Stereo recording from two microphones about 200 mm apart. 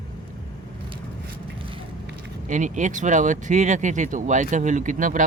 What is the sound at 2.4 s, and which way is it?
Speech, 40° right (ahead or behind).